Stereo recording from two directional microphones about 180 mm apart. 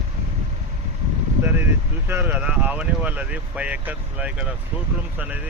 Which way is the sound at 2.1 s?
10° right (ahead or behind).